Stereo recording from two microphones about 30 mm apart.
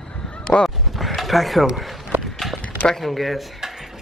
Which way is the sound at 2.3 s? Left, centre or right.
Centre.